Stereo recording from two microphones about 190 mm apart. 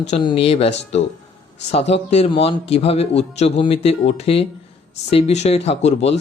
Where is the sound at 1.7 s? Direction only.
35° left (ahead or behind).